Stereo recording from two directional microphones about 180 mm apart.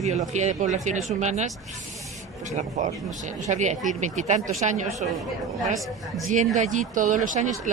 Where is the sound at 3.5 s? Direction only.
40° right (ahead or behind).